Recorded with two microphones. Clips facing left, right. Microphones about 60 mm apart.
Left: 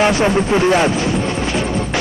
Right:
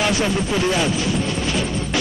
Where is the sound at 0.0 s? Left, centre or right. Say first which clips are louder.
Left 6 dB; left.